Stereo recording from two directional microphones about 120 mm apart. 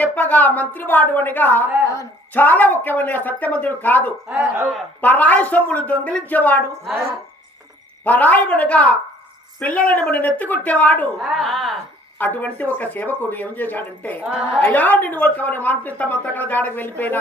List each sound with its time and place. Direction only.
0.0 s a woman's voice: 15° left (ahead or behind)
4.3 s speech: 20° right (ahead or behind)
4.9 s a woman's voice: 15° left (ahead or behind)
8.0 s a woman's voice: 15° left (ahead or behind)
11.2 s a woman's voice: centre (ahead or behind)
12.2 s a woman's voice: 15° left (ahead or behind)